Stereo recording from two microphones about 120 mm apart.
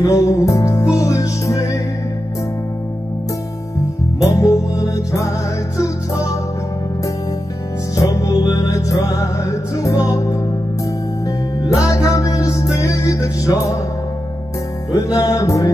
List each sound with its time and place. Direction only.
0.0 s music: 30° left (ahead or behind)
4.2 s music: 25° left (ahead or behind)
7.9 s music: 25° left (ahead or behind)
15.1 s music: 30° left (ahead or behind)